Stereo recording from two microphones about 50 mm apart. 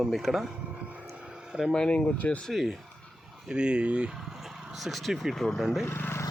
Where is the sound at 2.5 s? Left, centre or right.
Centre.